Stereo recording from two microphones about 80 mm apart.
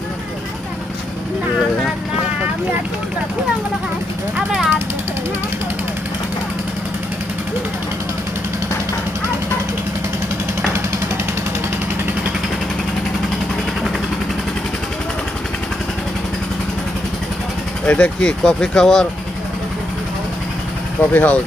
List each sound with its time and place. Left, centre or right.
4.4 s vehicle: centre
17.8 s speech: centre
21.1 s speech: left